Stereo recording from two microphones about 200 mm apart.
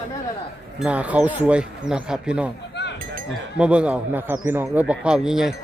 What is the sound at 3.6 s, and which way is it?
Speech, 5° right (ahead or behind).